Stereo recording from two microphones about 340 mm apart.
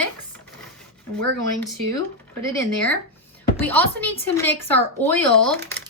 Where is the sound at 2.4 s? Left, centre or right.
Centre.